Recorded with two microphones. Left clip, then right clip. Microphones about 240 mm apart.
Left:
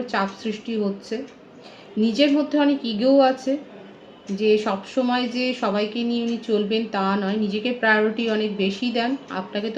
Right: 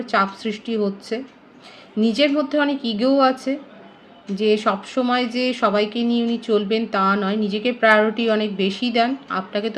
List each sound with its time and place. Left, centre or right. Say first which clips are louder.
0.0 s speech: right 5 dB; right